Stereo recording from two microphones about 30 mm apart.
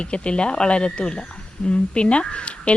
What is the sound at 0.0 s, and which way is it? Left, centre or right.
Speech, left.